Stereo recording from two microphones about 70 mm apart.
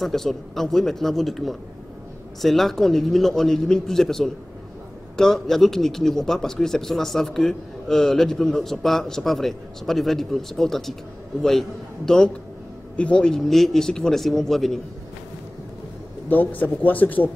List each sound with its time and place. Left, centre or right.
0.0 s a man's voice: centre
12.1 s a man's voice: centre
16.3 s speech: left